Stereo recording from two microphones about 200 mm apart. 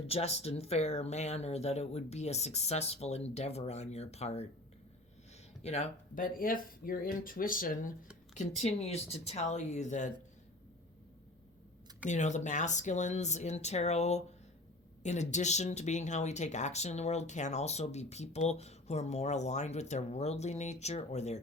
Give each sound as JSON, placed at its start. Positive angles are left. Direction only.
{"t": 0.1, "sound": "speech", "side_deg": 30}
{"t": 5.6, "sound": "speech", "side_deg": 35}
{"t": 8.4, "sound": "speech", "side_deg": 30}
{"t": 12.0, "sound": "speech", "side_deg": 35}